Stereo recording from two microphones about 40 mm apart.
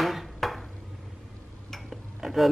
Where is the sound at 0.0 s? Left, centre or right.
Centre.